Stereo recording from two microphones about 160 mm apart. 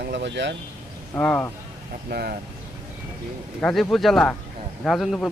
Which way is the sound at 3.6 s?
5° left (ahead or behind).